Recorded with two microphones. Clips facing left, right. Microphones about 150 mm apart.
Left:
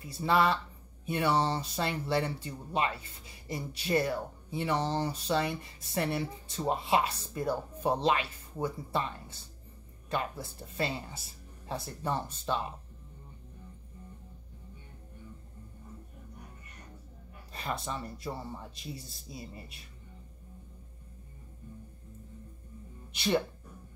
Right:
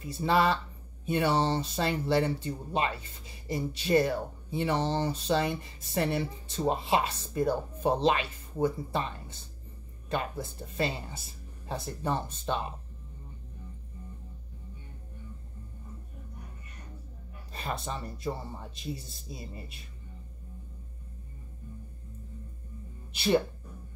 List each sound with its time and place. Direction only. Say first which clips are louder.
0.0 s speech: right 1 dB; 25° right (ahead or behind)
17.5 s speech: right 1 dB; 25° right (ahead or behind)